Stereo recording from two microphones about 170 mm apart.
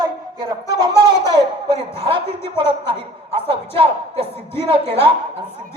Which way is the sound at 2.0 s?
30° right (ahead or behind).